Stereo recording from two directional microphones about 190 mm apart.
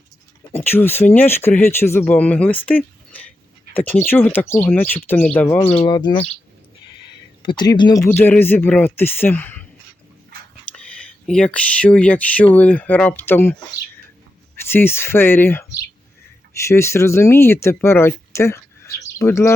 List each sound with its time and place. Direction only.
0.5 s speech: 10° left (ahead or behind)
5.7 s speech: 25° left (ahead or behind)
7.4 s speech: 25° left (ahead or behind)
8.0 s speech: 10° left (ahead or behind)
10.7 s speech: 5° left (ahead or behind)
16.6 s speech: 15° left (ahead or behind)